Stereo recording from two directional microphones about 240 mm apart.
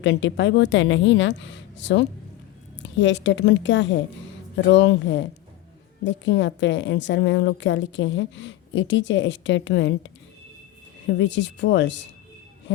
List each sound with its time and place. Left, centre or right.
0.0 s a woman's voice: left